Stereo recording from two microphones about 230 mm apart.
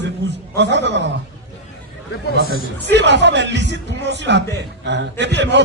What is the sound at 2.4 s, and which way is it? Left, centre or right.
A man's voice, right.